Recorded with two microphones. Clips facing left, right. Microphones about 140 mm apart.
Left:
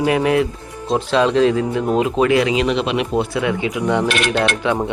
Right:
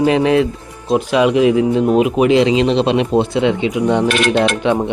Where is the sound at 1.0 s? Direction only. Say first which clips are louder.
Right 2 dB; 15° right (ahead or behind).